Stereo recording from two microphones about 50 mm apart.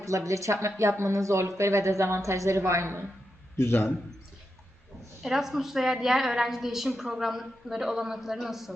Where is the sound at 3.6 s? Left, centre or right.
Left.